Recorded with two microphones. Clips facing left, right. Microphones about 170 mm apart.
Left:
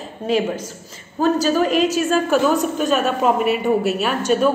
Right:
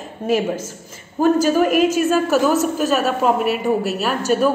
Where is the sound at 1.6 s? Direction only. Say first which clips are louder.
Right 2 dB; 50° right (ahead or behind).